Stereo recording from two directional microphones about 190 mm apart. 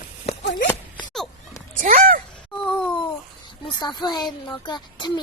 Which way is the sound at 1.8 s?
45° right (ahead or behind).